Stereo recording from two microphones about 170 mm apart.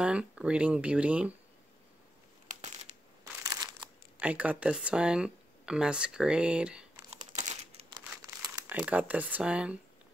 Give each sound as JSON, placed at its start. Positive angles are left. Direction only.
{"t": 0.0, "sound": "speech", "side_deg": -5}
{"t": 2.4, "sound": "a sound", "side_deg": -45}
{"t": 3.4, "sound": "crumpling", "side_deg": -25}
{"t": 4.2, "sound": "speech", "side_deg": -10}
{"t": 7.1, "sound": "crumpling", "side_deg": -45}
{"t": 7.9, "sound": "crumpling", "side_deg": -20}
{"t": 8.7, "sound": "speech", "side_deg": -10}